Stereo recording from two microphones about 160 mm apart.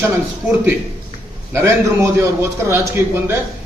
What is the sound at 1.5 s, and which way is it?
A man's voice, 15° right (ahead or behind).